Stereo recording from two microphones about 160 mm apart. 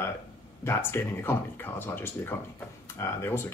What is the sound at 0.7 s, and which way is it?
Speech, 15° left (ahead or behind).